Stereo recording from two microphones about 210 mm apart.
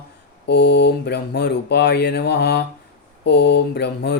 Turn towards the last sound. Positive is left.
turn(degrees=55)  # may be behind; listen again after turning